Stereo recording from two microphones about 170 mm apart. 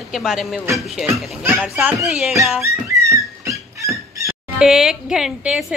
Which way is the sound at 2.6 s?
15° right (ahead or behind).